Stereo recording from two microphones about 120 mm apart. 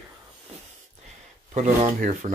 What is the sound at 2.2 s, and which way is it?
Speech, 60° right (ahead or behind).